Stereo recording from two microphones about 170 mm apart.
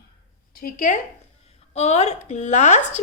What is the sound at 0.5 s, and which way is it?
Speech, 55° left (ahead or behind).